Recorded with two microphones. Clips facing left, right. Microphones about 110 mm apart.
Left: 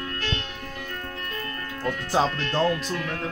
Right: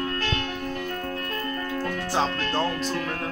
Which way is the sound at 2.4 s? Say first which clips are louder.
Left 2 dB; 35° right (ahead or behind).